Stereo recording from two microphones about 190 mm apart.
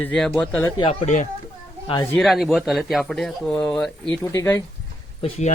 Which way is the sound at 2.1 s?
Centre (ahead or behind).